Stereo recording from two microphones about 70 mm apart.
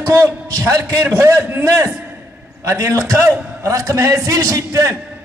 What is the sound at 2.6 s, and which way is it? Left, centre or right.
A man's voice, right.